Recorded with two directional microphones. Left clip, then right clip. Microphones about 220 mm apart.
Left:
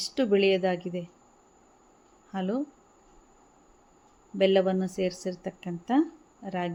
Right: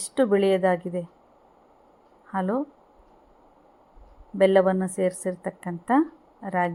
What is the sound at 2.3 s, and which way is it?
Speech, 5° right (ahead or behind).